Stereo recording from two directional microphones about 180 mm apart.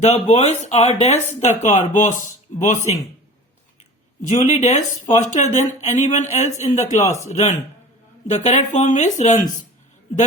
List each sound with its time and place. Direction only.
0.0 s speech: 40° left (ahead or behind)
4.3 s speech: 40° left (ahead or behind)